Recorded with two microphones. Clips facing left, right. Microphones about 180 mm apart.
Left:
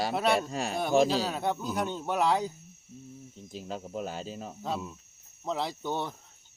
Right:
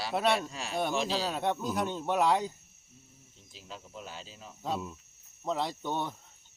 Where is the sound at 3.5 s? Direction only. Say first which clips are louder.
Left 10 dB; 50° left (ahead or behind).